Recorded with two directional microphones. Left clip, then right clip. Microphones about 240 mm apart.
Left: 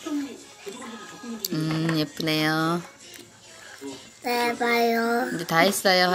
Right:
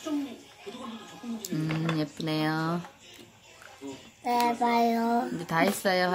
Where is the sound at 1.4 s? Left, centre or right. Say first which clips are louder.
Left 5 dB; centre.